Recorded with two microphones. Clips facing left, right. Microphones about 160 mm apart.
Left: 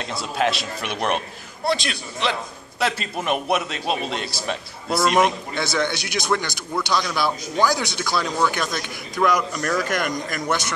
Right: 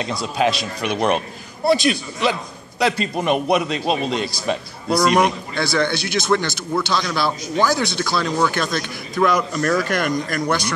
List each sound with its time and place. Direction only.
0.0 s a man's voice: centre (ahead or behind)
5.5 s a man's voice: 20° left (ahead or behind)